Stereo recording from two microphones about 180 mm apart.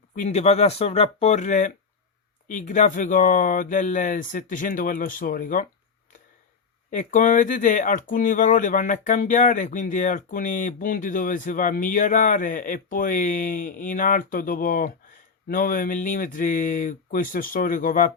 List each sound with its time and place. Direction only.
0.2 s speech: 40° left (ahead or behind)
6.9 s speech: 45° left (ahead or behind)